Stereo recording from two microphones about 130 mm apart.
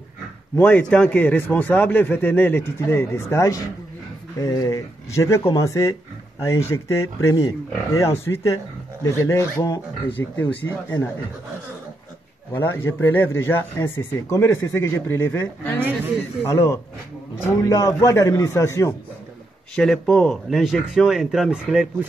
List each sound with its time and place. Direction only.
0.6 s a man's voice: 15° left (ahead or behind)
12.5 s a man's voice: 15° left (ahead or behind)
19.7 s speech: 5° left (ahead or behind)